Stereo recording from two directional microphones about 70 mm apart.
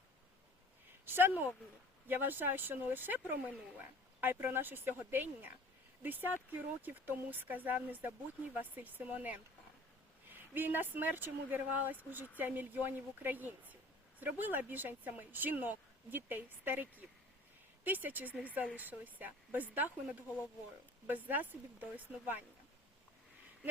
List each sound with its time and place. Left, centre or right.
1.0 s speech: right
21.1 s speech: right